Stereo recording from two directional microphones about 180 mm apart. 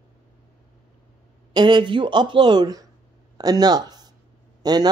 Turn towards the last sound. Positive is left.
turn(degrees=-20)  # may be behind; listen again after turning